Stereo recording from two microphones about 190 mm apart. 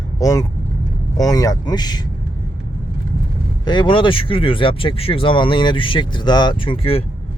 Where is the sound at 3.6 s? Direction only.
25° left (ahead or behind).